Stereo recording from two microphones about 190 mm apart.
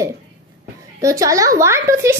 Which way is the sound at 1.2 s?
15° right (ahead or behind).